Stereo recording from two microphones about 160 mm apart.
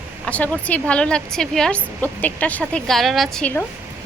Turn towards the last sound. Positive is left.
turn(degrees=10)  # may be behind; listen again after turning